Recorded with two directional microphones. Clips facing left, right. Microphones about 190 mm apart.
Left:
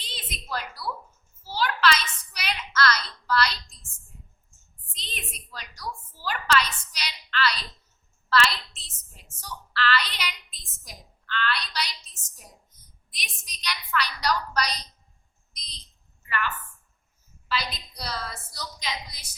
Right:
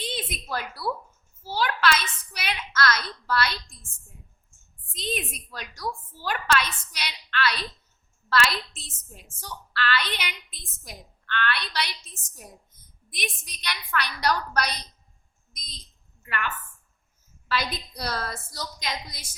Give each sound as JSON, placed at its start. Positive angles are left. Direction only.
{"t": 0.0, "sound": "a sound", "side_deg": -50}
{"t": 1.5, "sound": "a child's voice", "side_deg": -50}
{"t": 4.9, "sound": "a woman's voice", "side_deg": -50}
{"t": 16.2, "sound": "a woman's voice", "side_deg": -55}
{"t": 17.5, "sound": "a woman's voice", "side_deg": -55}